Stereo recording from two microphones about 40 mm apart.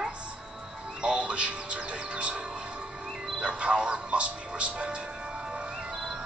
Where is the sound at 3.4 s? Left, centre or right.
Right.